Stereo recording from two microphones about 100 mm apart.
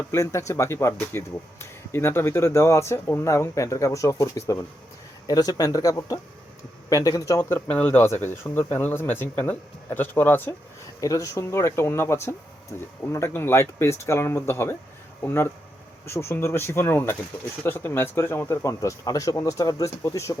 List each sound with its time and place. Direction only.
0.1 s speech: 30° left (ahead or behind)
7.7 s speech: 15° left (ahead or behind)
11.0 s speech: 35° left (ahead or behind)